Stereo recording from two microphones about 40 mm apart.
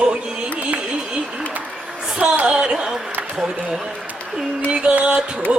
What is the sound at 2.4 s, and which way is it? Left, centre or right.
Speech, right.